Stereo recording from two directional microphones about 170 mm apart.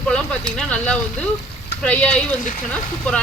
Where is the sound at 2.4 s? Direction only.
50° left (ahead or behind).